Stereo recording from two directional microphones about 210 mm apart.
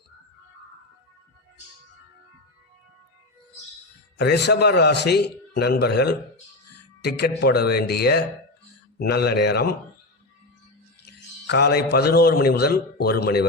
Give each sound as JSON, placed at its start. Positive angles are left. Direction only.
{"t": 4.2, "sound": "a man's voice", "side_deg": 55}
{"t": 11.4, "sound": "a man's voice", "side_deg": 50}